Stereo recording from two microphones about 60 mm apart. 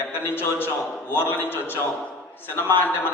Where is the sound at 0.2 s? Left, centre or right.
Left.